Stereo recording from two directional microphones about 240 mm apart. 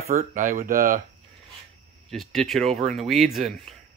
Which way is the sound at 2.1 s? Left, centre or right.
Centre.